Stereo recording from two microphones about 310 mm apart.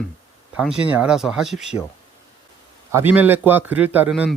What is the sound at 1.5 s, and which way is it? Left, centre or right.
Speech, left.